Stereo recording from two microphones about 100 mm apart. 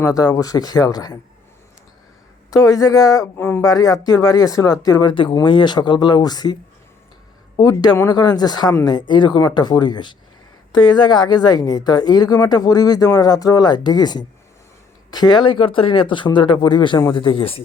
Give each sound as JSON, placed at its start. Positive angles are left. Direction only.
{"t": 0.0, "sound": "speech", "side_deg": 35}
{"t": 2.5, "sound": "speech", "side_deg": 35}
{"t": 3.7, "sound": "a woman's voice", "side_deg": 35}
{"t": 7.6, "sound": "a woman's voice", "side_deg": 40}